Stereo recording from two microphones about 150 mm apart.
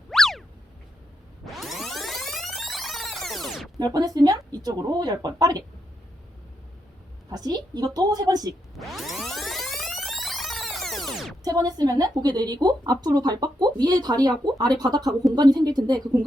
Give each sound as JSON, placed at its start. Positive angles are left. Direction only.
{"t": 0.1, "sound": "boing", "side_deg": 0}
{"t": 1.5, "sound": "music", "side_deg": 0}
{"t": 3.9, "sound": "a woman's voice", "side_deg": -25}
{"t": 7.3, "sound": "a woman's voice", "side_deg": -25}
{"t": 8.8, "sound": "music", "side_deg": 0}
{"t": 11.4, "sound": "a woman's voice", "side_deg": -25}